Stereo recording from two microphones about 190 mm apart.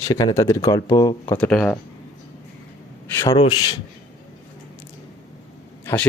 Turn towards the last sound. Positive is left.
turn(degrees=10)  # may be behind; listen again after turning